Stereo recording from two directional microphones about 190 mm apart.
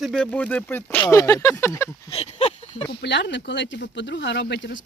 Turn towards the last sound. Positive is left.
turn(degrees=65)  # may be behind; listen again after turning